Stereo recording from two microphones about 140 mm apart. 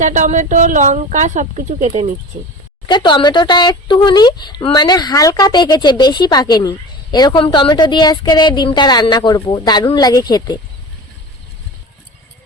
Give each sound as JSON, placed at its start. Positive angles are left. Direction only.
{"t": 0.0, "sound": "speech", "side_deg": -60}
{"t": 2.8, "sound": "speech", "side_deg": 35}